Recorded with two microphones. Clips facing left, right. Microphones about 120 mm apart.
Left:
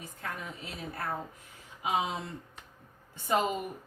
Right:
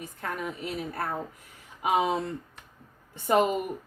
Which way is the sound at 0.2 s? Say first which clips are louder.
Right 7 dB; 55° right (ahead or behind).